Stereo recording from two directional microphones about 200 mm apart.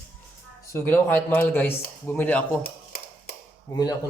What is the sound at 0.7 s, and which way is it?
A man's voice, 15° left (ahead or behind).